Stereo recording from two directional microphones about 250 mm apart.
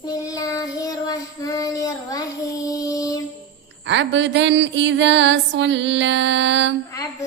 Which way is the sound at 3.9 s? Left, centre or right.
Right.